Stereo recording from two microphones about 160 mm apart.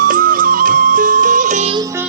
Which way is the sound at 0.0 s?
60° right (ahead or behind).